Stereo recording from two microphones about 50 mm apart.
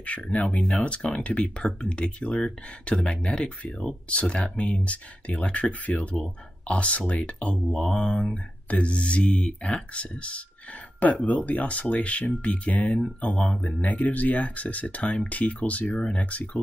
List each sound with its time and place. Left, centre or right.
0.0 s speech: left
7.5 s mantra: centre
8.6 s speech: left